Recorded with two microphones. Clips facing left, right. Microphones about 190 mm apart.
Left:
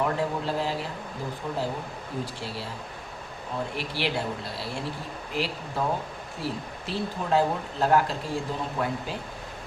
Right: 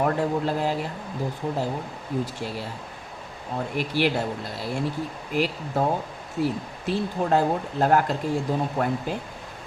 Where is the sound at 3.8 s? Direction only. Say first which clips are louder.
Right 10 dB; 50° right (ahead or behind).